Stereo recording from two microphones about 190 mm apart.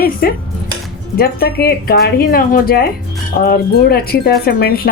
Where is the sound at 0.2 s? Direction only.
50° left (ahead or behind).